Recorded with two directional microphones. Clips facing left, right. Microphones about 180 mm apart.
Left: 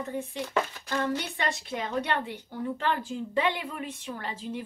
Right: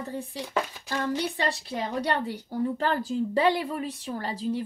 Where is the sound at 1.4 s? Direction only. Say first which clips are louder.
Right 2 dB; 35° right (ahead or behind).